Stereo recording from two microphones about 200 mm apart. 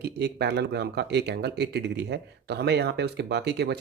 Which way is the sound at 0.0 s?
55° right (ahead or behind).